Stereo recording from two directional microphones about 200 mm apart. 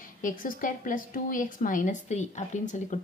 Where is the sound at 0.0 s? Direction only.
45° left (ahead or behind).